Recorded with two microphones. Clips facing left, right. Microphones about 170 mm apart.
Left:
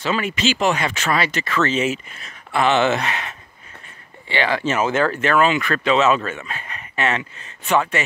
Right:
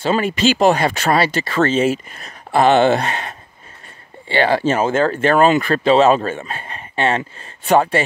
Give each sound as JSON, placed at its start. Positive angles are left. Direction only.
{"t": 0.0, "sound": "speech", "side_deg": -35}